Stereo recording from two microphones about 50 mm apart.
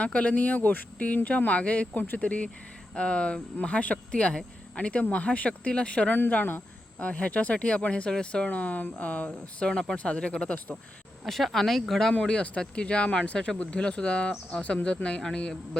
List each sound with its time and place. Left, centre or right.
0.0 s speech: left
2.0 s speech: left
2.2 s speech: left
6.1 s speech: left
7.0 s speech: left
9.6 s speech: centre
11.3 s speech: centre
12.2 s speech: left